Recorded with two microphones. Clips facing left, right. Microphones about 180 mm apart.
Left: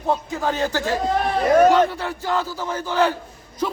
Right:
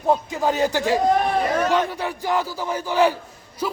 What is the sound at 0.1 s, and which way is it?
Speech, 15° right (ahead or behind).